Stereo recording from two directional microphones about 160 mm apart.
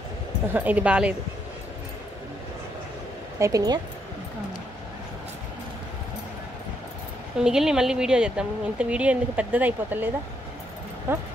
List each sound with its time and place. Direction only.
0.5 s a woman's voice: 10° right (ahead or behind)
3.3 s speech: 20° right (ahead or behind)
7.3 s a woman's voice: 5° right (ahead or behind)